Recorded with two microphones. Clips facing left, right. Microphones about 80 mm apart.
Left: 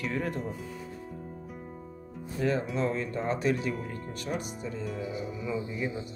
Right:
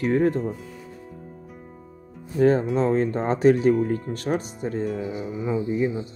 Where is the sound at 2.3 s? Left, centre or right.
Right.